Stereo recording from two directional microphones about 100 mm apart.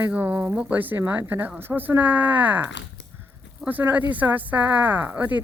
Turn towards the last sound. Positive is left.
turn(degrees=-15)  # may be behind; listen again after turning